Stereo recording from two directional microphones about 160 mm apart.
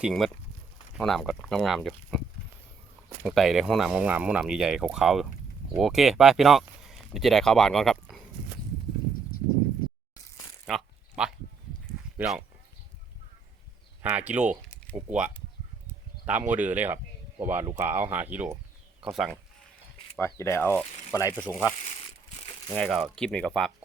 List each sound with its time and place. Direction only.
0.0 s speech: centre (ahead or behind)
3.2 s speech: centre (ahead or behind)
10.7 s speech: centre (ahead or behind)
11.1 s a sound: 5° right (ahead or behind)
12.1 s speech: 5° right (ahead or behind)
14.0 s speech: 10° right (ahead or behind)
20.1 s speech: 15° left (ahead or behind)
21.8 s crumpling: 40° left (ahead or behind)
22.7 s speech: centre (ahead or behind)